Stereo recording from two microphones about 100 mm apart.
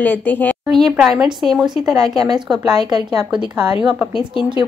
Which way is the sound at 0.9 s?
10° right (ahead or behind).